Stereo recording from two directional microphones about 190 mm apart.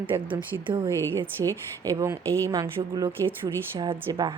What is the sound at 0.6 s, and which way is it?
Speech, 25° right (ahead or behind).